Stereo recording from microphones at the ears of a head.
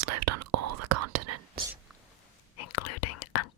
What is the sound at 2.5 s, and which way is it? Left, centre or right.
Whispering, left.